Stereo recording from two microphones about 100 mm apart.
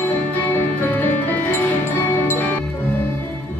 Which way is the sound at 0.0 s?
20° left (ahead or behind).